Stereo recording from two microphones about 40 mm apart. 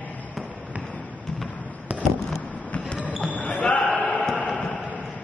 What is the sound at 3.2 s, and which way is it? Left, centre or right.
Basketball bounce, left.